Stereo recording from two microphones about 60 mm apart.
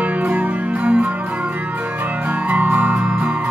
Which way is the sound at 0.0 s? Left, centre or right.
Right.